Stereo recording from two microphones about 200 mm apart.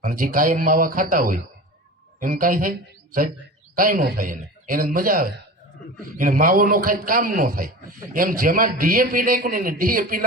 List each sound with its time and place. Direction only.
0.0 s a man's voice: 45° right (ahead or behind)
3.8 s a man's voice: 45° right (ahead or behind)